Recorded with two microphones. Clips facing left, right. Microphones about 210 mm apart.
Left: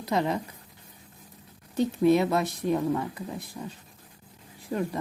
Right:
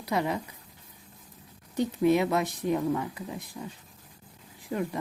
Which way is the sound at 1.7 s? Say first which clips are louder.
Left 2 dB; 15° right (ahead or behind).